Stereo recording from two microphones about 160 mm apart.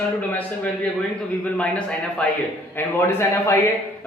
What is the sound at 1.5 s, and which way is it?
A man's voice, 5° left (ahead or behind).